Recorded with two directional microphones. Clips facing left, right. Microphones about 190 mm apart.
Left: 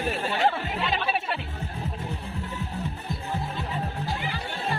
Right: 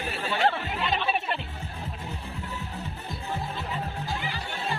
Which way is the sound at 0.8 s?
5° left (ahead or behind).